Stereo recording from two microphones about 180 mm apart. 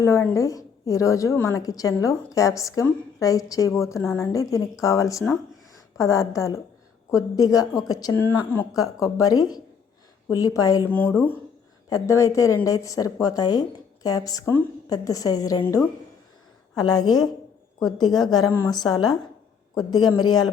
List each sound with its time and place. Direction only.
0.0 s a woman's voice: 15° left (ahead or behind)
11.9 s speech: 20° left (ahead or behind)